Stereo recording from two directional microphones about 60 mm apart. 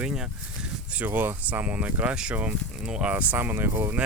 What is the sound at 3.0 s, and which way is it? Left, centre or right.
Speech, right.